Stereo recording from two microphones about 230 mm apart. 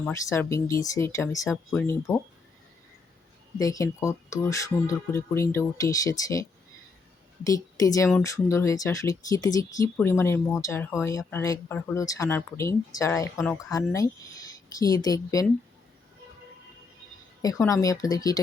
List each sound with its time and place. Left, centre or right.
0.0 s speech: centre
3.6 s speech: centre
7.4 s speech: centre
17.7 s speech: centre